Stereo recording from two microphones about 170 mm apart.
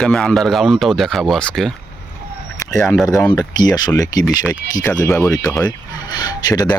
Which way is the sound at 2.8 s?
Centre (ahead or behind).